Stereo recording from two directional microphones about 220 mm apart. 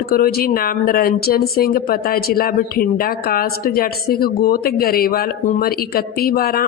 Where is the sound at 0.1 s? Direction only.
45° left (ahead or behind).